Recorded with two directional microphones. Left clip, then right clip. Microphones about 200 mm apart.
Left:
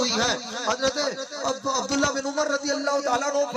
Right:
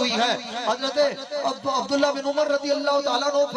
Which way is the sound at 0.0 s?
20° right (ahead or behind).